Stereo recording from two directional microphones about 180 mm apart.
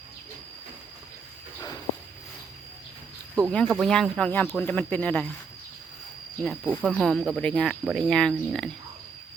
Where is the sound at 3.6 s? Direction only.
Centre (ahead or behind).